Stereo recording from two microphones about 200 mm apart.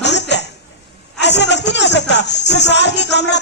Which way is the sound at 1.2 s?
60° left (ahead or behind).